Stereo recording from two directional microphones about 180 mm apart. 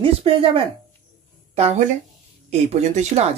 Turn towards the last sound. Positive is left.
turn(degrees=-35)  # may be behind; listen again after turning